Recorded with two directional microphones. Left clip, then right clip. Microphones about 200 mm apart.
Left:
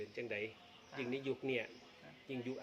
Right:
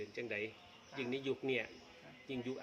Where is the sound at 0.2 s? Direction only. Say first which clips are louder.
Right 1 dB; 10° right (ahead or behind).